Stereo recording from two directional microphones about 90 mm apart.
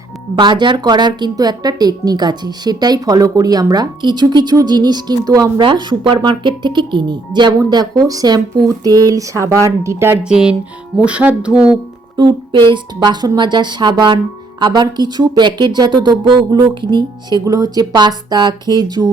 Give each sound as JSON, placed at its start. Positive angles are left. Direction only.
{"t": 0.3, "sound": "a woman's voice", "side_deg": -60}
{"t": 5.5, "sound": "a woman's voice", "side_deg": -55}
{"t": 10.2, "sound": "speech", "side_deg": -10}
{"t": 12.1, "sound": "speech", "side_deg": -60}
{"t": 17.4, "sound": "a woman's voice", "side_deg": -45}